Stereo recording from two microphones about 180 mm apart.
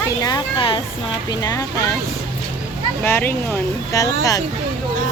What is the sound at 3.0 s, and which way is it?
Speech, 10° left (ahead or behind).